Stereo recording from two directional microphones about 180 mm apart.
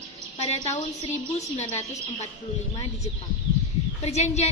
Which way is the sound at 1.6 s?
35° left (ahead or behind).